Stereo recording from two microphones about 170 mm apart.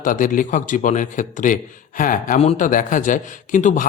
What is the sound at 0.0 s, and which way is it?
Speech, 50° left (ahead or behind).